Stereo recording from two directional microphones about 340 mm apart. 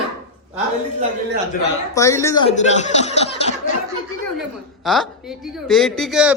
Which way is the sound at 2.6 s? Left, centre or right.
Left.